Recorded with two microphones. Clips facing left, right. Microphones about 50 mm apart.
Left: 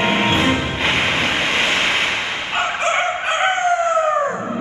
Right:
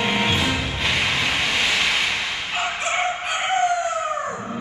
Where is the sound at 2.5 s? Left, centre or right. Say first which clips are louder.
Left 5 dB; left.